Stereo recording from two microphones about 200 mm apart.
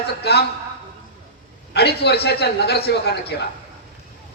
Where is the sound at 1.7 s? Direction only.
55° left (ahead or behind).